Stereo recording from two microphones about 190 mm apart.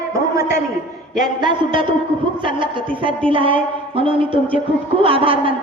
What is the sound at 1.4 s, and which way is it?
A woman's voice, 25° right (ahead or behind).